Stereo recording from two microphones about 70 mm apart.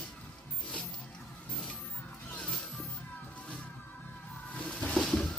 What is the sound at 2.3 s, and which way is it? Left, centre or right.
Music, centre.